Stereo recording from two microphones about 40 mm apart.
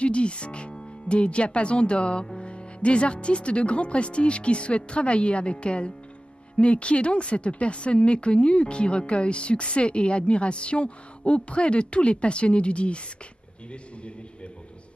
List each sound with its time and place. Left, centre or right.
0.0 s a man's voice: left